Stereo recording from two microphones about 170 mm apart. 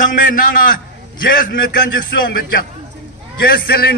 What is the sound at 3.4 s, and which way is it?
Speech, 65° left (ahead or behind).